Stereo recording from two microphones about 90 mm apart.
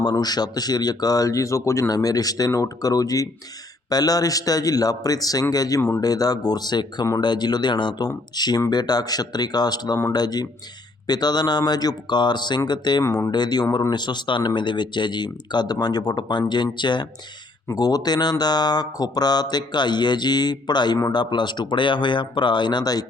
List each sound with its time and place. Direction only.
0.0 s speech: 50° left (ahead or behind)
17.7 s speech: 45° left (ahead or behind)